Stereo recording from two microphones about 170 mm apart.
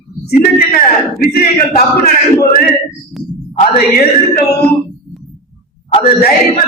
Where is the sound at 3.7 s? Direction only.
65° left (ahead or behind).